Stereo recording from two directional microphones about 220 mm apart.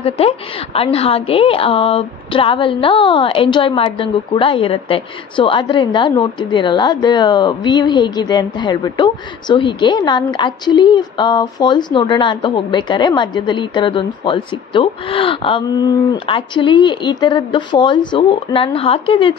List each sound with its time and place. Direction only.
0.7 s a woman's voice: 25° left (ahead or behind)